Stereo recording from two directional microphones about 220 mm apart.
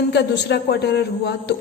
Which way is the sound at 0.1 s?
50° left (ahead or behind).